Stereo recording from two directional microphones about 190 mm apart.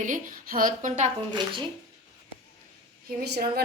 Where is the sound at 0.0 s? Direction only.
45° right (ahead or behind).